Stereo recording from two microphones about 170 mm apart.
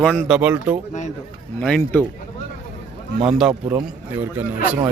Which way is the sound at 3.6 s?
15° right (ahead or behind).